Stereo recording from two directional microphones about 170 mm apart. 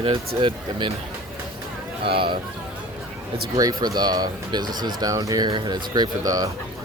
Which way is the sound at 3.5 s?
20° right (ahead or behind).